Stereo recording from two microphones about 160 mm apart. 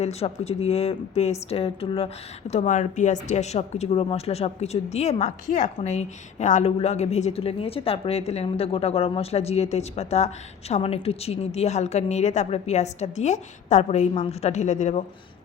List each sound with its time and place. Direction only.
0.0 s speech: 40° left (ahead or behind)
2.5 s speech: 50° left (ahead or behind)